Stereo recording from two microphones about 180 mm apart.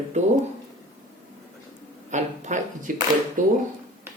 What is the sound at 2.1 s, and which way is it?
Speech, 40° right (ahead or behind).